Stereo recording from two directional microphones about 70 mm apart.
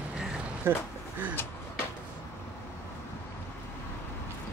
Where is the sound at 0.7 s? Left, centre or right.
Right.